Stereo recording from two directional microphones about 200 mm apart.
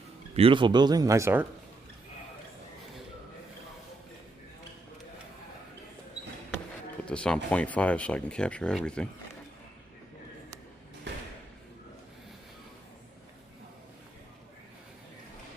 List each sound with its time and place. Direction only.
0.3 s speech: 25° right (ahead or behind)
7.1 s speech: 5° left (ahead or behind)